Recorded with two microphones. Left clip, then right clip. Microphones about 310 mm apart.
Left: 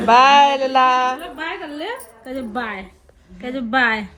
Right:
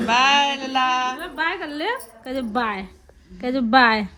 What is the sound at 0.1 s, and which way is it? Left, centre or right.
A woman's voice, centre.